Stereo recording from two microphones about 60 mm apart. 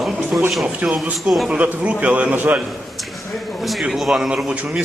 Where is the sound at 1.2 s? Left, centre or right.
Centre.